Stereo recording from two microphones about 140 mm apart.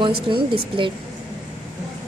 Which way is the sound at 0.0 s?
35° right (ahead or behind).